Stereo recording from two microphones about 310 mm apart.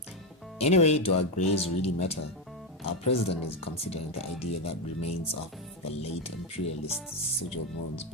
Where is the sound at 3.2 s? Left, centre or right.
Left.